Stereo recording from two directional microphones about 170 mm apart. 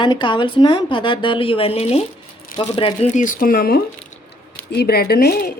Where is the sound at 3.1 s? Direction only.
50° left (ahead or behind).